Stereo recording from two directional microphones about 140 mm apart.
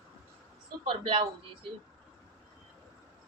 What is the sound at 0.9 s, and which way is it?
Speech, 40° right (ahead or behind).